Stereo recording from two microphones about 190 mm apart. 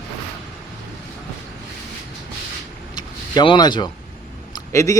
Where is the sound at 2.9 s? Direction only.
25° left (ahead or behind).